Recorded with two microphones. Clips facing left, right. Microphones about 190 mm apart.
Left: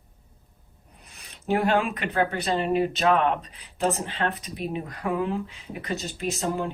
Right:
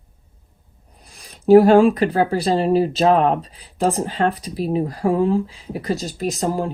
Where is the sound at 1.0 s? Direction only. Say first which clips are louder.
Right 13 dB; 35° right (ahead or behind).